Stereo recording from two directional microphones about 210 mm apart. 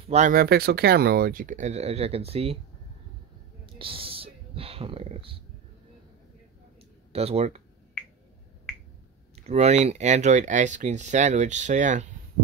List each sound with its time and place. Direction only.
0.0 s speech: 35° right (ahead or behind)
3.6 s a sound: 25° right (ahead or behind)
7.1 s speech: 30° right (ahead or behind)
9.3 s speech: 30° right (ahead or behind)